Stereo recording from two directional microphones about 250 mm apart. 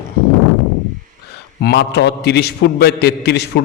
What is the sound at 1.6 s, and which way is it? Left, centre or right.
A man's voice, left.